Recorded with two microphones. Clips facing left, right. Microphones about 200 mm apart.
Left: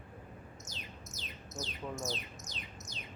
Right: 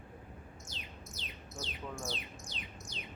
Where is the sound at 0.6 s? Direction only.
45° left (ahead or behind).